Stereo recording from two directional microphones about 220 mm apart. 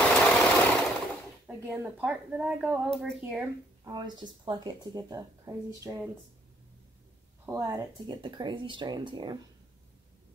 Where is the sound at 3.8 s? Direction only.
20° right (ahead or behind).